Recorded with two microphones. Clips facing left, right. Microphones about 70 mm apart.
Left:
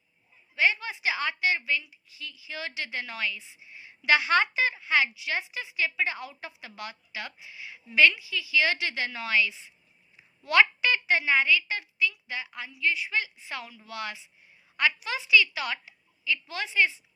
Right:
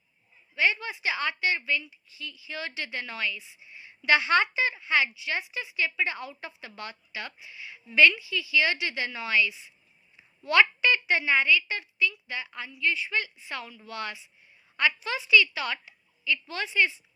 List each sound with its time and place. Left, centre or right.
0.5 s a woman's voice: left